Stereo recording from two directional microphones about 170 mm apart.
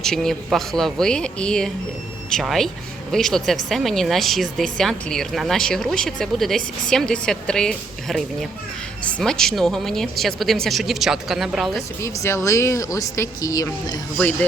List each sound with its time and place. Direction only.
0.0 s speech: centre (ahead or behind)
11.9 s speech: 15° left (ahead or behind)